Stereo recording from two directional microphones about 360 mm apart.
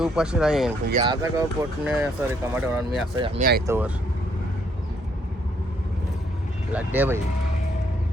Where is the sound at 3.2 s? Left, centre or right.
Centre.